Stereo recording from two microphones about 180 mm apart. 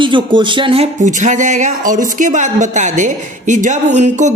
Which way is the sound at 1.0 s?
45° right (ahead or behind).